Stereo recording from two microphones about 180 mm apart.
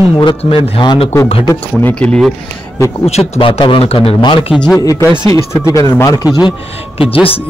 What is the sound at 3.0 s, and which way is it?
A man's voice, 35° left (ahead or behind).